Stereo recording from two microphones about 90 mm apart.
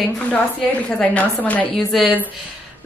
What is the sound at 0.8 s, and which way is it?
Speech, 15° left (ahead or behind).